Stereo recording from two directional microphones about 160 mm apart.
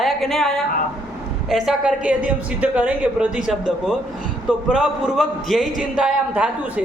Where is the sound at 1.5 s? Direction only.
5° right (ahead or behind).